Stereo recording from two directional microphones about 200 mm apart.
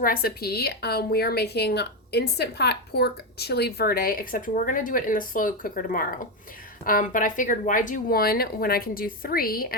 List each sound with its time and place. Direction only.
0.0 s a woman's voice: 45° left (ahead or behind)